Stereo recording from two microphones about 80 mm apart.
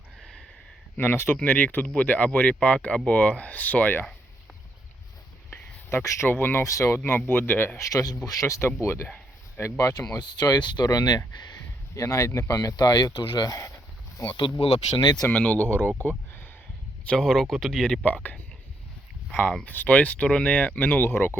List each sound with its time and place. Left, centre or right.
0.9 s speech: left
5.5 s speech: left
6.7 s speech: left
7.8 s speech: left
10.2 s speech: left
11.9 s speech: left
12.7 s speech: left
15.3 s speech: centre
16.0 s a sound: left
17.1 s speech: centre
18.0 s speech: left